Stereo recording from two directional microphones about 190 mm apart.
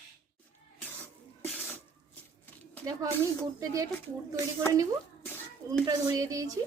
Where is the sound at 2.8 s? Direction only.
15° right (ahead or behind).